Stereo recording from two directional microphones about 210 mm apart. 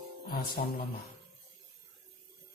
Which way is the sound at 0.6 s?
45° left (ahead or behind).